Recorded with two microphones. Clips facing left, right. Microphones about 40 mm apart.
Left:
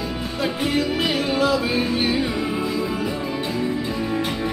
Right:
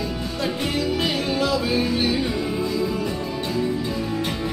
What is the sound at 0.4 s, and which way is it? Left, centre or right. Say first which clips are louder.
Music: left 3 dB; centre.